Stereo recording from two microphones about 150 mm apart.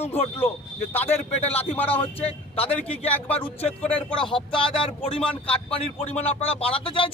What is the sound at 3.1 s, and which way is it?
Speech, 10° left (ahead or behind).